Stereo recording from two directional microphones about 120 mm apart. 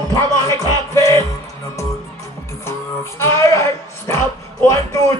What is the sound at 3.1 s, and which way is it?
Speech, 25° left (ahead or behind).